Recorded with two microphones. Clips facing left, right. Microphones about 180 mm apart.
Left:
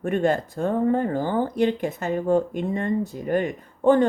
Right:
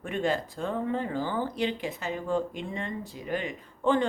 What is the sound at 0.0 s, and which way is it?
Speech, 50° left (ahead or behind).